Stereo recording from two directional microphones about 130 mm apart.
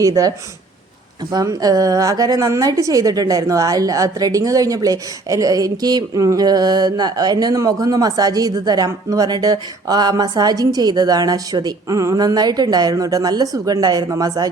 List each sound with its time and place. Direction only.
0.0 s a woman's voice: 25° right (ahead or behind)